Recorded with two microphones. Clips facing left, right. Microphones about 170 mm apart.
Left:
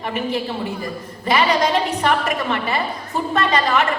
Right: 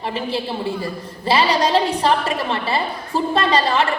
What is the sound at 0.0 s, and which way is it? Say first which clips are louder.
A woman's voice: left 1 dB; 30° right (ahead or behind).